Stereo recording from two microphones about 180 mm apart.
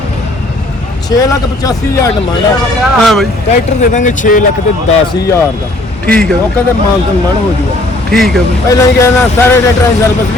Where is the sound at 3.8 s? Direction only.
45° left (ahead or behind).